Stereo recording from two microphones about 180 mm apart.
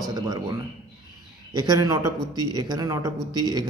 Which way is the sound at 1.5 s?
20° right (ahead or behind).